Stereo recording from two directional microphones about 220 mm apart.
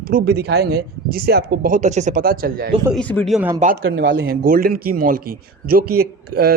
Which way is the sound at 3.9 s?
40° right (ahead or behind).